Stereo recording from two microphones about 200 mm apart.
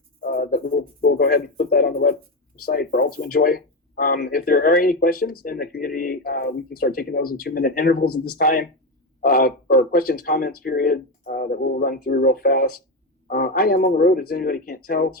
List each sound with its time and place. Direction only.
0.2 s speech: 45° left (ahead or behind)